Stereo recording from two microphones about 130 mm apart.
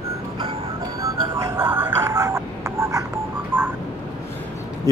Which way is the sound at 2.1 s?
25° right (ahead or behind).